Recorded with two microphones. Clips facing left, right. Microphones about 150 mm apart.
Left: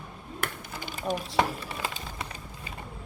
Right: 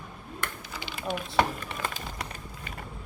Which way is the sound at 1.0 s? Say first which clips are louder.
Left 2 dB; 35° left (ahead or behind).